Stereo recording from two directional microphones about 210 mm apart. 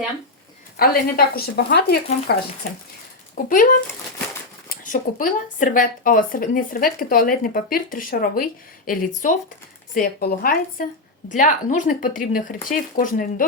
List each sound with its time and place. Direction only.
0.8 s a woman's voice: 45° left (ahead or behind)
3.3 s a woman's voice: 40° left (ahead or behind)